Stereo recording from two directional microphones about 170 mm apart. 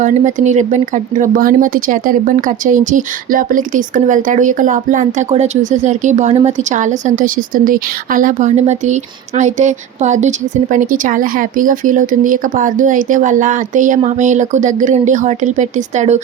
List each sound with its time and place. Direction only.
0.0 s a woman's voice: 45° right (ahead or behind)